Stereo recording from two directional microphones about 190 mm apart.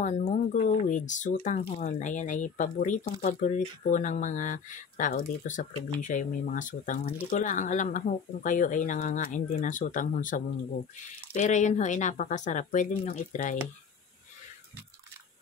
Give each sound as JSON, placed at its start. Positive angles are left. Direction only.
{"t": 0.0, "sound": "speech", "side_deg": 40}